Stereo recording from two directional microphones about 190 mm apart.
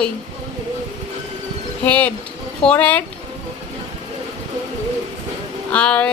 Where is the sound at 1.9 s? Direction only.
5° left (ahead or behind).